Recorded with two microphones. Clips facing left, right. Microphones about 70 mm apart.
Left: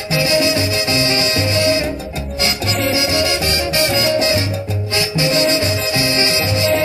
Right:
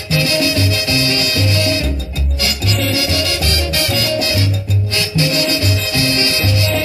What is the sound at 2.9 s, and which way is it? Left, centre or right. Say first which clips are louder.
Salsa music: left 2 dB; left.